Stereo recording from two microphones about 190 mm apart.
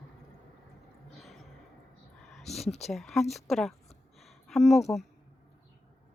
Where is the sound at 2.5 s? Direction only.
35° left (ahead or behind).